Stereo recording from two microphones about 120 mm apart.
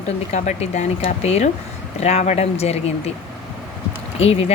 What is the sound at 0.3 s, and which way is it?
Speech, 80° left.